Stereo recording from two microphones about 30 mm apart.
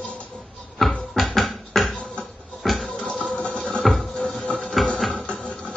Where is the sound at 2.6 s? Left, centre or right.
Centre.